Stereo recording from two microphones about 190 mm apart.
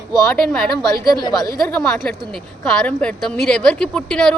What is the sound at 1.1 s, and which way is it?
Speech, 20° left (ahead or behind).